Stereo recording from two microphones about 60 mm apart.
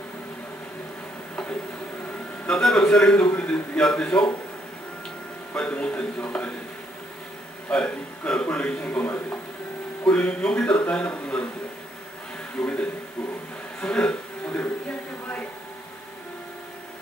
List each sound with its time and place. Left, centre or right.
1.3 s a sound: centre
2.9 s a man's voice: centre
3.2 s a man's voice: left
5.6 s a man's voice: centre
7.7 s a man's voice: centre
12.5 s a man's voice: left
13.8 s a sound: centre